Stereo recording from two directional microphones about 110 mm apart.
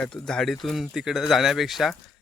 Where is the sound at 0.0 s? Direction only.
5° left (ahead or behind).